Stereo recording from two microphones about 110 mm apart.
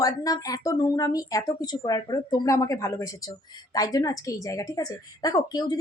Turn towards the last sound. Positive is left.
turn(degrees=40)  # may be behind; listen again after turning